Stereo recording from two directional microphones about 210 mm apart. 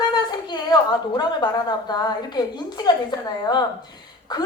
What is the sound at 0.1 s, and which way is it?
A woman's voice, 20° left (ahead or behind).